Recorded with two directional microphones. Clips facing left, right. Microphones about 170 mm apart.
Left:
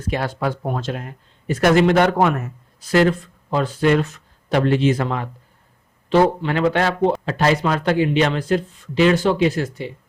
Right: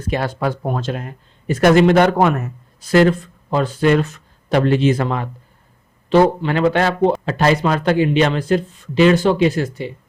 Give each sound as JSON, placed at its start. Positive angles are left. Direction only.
{"t": 0.1, "sound": "speech", "side_deg": -45}
{"t": 1.7, "sound": "speech", "side_deg": -30}